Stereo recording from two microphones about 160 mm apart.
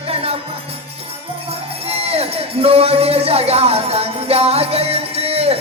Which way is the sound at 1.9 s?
40° right (ahead or behind).